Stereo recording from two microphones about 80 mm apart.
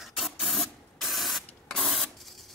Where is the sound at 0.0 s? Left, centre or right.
Centre.